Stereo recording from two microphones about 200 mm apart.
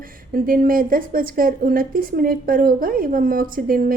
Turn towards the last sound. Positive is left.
turn(degrees=-45)  # may be behind; listen again after turning